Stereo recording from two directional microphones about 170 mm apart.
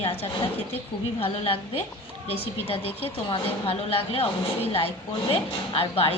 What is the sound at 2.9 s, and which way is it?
Speech, 10° left (ahead or behind).